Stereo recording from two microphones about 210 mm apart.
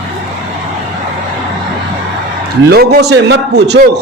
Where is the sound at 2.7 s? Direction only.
45° right (ahead or behind).